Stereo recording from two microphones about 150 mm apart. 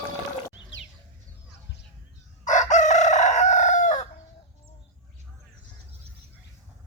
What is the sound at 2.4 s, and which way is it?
Chicken, 55° left (ahead or behind).